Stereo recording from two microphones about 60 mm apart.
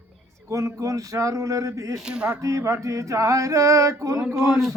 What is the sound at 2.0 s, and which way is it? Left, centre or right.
Chant, centre.